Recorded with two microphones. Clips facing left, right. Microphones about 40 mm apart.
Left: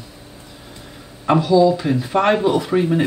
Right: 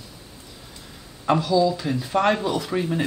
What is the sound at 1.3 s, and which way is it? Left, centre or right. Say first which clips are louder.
Speech: left 6 dB; centre.